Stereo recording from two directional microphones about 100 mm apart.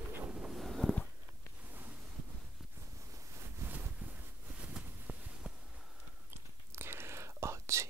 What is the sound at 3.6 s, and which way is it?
Wind noise, 30° right (ahead or behind).